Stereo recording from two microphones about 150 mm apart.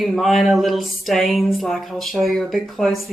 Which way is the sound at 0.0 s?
Centre (ahead or behind).